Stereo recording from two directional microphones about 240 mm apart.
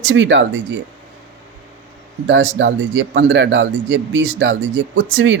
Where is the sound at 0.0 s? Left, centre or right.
Right.